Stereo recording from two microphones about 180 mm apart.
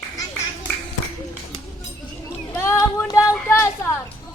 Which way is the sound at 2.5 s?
15° left (ahead or behind).